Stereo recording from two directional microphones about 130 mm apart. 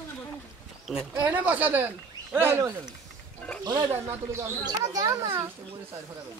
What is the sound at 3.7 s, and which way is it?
Speech, 30° right (ahead or behind).